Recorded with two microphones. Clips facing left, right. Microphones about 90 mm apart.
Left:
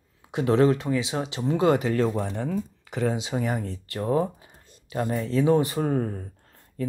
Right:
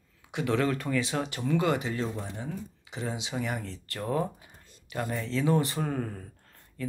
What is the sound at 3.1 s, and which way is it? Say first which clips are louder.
Speech: left 6 dB; 40° left (ahead or behind).